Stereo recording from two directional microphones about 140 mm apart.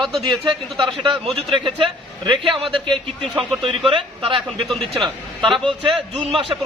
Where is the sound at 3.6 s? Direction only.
35° right (ahead or behind).